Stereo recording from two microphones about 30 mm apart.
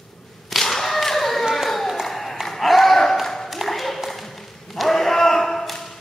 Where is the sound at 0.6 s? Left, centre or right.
Centre.